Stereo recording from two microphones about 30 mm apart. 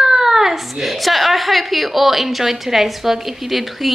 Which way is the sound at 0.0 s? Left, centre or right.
Centre.